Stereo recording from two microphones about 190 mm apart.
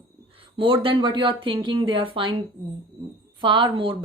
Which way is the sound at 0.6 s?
30° right (ahead or behind).